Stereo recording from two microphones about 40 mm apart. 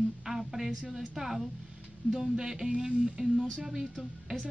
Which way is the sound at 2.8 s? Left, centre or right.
Right.